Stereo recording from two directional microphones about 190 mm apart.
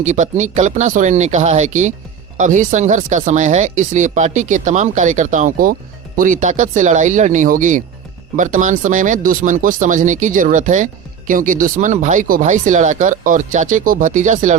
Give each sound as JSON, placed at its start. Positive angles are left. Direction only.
{"t": 0.0, "sound": "speech", "side_deg": -40}